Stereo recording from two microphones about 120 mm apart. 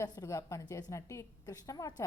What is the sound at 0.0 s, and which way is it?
A woman's voice, 30° left (ahead or behind).